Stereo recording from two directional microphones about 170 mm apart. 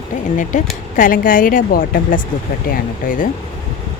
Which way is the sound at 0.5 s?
50° left (ahead or behind).